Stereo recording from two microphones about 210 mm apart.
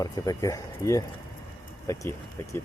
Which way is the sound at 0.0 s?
15° left (ahead or behind).